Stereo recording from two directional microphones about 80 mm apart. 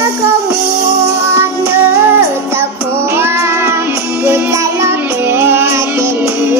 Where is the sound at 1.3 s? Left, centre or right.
Right.